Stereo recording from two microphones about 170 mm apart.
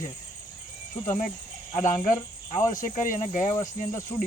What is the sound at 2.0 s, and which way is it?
Cricket, 45° left (ahead or behind).